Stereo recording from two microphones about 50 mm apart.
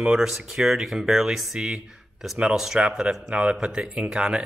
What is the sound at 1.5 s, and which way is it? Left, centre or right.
Speech, centre.